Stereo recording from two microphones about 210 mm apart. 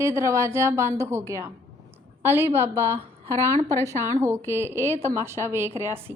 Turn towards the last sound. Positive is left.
turn(degrees=-10)  # may be behind; listen again after turning